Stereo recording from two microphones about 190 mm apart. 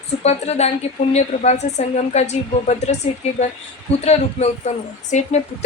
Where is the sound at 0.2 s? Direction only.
35° left (ahead or behind).